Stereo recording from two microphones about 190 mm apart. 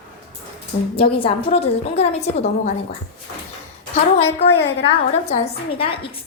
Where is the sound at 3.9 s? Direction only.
35° left (ahead or behind).